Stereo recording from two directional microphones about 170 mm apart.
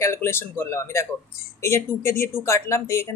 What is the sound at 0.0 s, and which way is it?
Speech, 15° left (ahead or behind).